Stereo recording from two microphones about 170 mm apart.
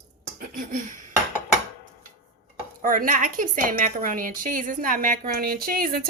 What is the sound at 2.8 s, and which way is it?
A woman's voice, 50° right (ahead or behind).